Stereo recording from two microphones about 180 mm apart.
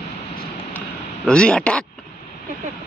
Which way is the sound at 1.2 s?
5° left (ahead or behind).